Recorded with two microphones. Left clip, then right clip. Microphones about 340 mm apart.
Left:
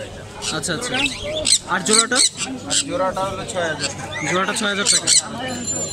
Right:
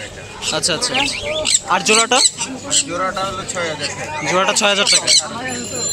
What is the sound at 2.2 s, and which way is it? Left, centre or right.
Speech, left.